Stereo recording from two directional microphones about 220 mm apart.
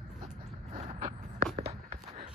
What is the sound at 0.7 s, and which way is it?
Vehicle, 30° right (ahead or behind).